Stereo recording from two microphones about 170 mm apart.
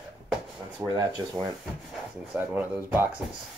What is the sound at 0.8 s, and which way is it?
Speech, 20° right (ahead or behind).